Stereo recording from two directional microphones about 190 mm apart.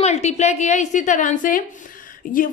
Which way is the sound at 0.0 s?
35° left (ahead or behind).